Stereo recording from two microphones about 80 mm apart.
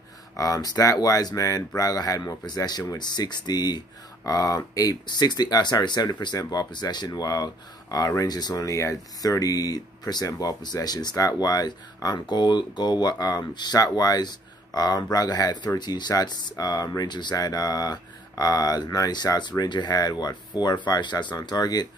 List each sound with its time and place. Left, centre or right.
0.4 s speech: left
5.0 s speech: left